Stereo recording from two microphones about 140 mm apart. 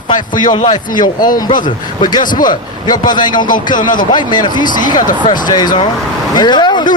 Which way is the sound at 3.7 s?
70° left (ahead or behind).